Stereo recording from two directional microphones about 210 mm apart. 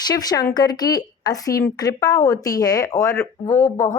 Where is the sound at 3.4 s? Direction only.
30° left (ahead or behind).